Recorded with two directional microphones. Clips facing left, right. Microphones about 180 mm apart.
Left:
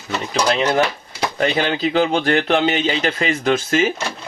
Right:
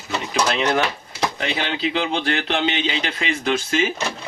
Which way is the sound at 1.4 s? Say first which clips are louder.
Left 9 dB; 45° left (ahead or behind).